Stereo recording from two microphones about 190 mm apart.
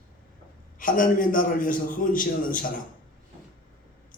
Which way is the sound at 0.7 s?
45° left (ahead or behind).